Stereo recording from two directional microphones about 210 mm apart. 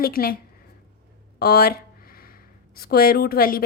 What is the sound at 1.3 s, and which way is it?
Speech, 50° left (ahead or behind).